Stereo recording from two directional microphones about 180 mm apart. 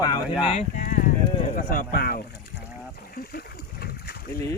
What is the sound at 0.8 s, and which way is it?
Sheep, 50° left (ahead or behind).